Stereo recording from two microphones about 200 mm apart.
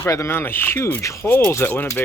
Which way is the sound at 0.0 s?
15° left (ahead or behind).